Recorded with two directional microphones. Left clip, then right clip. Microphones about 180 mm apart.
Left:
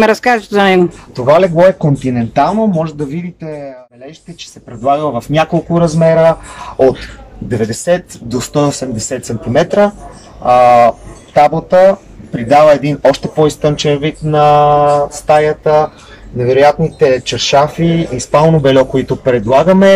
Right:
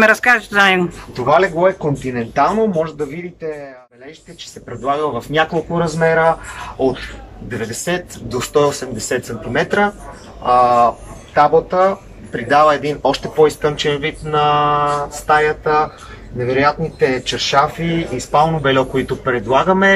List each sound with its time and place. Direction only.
0.0 s speech: 25° left (ahead or behind)
7.4 s speech: 25° left (ahead or behind)